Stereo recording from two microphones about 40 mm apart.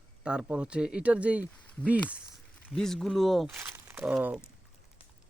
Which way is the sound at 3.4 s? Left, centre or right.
Right.